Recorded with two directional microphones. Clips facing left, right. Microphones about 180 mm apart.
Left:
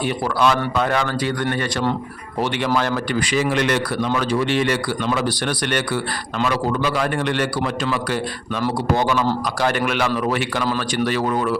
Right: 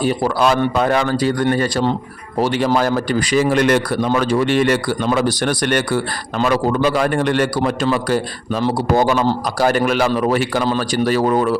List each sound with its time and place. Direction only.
0.0 s a man's voice: 40° right (ahead or behind)
2.4 s a man's voice: 35° right (ahead or behind)